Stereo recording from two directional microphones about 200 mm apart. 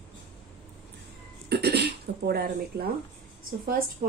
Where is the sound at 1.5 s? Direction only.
55° right (ahead or behind).